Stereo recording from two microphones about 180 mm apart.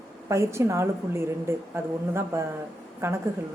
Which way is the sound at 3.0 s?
15° right (ahead or behind).